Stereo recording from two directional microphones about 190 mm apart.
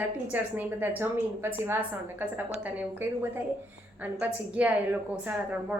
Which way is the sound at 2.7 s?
10° right (ahead or behind).